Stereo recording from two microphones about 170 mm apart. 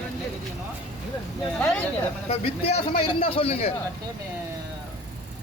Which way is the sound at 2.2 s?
35° left (ahead or behind).